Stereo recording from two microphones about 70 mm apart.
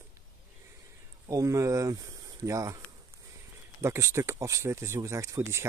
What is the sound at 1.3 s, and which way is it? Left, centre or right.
Speech, right.